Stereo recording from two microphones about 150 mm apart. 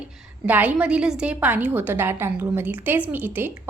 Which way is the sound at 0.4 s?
10° right (ahead or behind).